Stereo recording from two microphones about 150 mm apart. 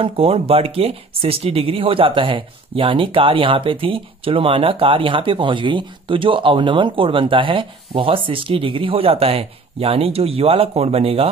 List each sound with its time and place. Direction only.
0.0 s speech: 40° right (ahead or behind)